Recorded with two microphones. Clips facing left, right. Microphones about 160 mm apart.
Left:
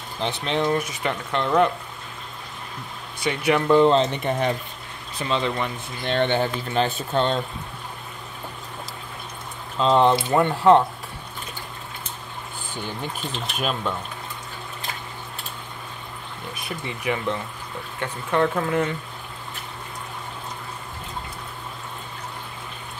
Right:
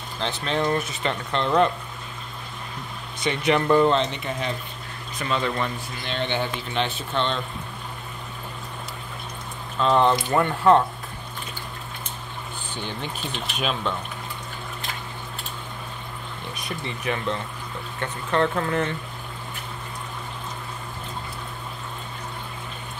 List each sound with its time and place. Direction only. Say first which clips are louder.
0.2 s speech: left 1 dB; 20° left (ahead or behind)
3.3 s speech: left 1 dB; 5° left (ahead or behind)
3.7 s speech: left 3 dB; 25° left (ahead or behind)
4.0 s speech: left 5 dB; 50° left (ahead or behind)
5.2 s speech: left 1 dB; 25° left (ahead or behind)
6.0 s speech: left 5 dB; 55° left (ahead or behind)
9.8 s speech: left 2 dB; 20° left (ahead or behind)
13.6 s speech: even; 5° left (ahead or behind)
16.6 s speech: left 2 dB; 15° left (ahead or behind)